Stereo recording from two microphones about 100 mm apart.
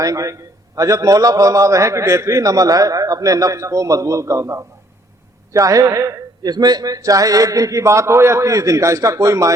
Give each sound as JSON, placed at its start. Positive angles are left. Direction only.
{"t": 0.0, "sound": "a man's voice", "side_deg": -35}